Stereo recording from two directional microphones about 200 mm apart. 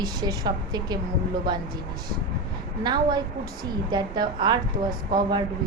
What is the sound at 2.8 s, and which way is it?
A woman's voice, 20° right (ahead or behind).